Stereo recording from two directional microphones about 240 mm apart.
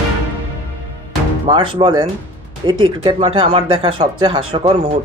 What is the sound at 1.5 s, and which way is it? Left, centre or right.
Speech, centre.